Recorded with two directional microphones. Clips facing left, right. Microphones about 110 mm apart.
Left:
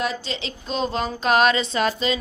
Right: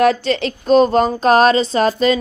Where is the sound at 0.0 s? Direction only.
60° right (ahead or behind).